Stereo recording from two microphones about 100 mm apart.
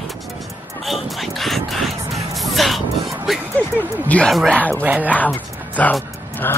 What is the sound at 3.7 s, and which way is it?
Speech, 15° left (ahead or behind).